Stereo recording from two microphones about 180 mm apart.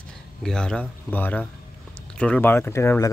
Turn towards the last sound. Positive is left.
turn(degrees=15)  # may be behind; listen again after turning